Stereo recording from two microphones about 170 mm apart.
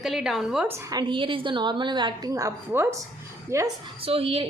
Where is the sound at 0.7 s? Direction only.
20° right (ahead or behind).